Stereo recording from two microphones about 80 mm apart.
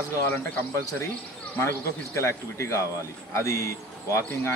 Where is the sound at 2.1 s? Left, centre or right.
Left.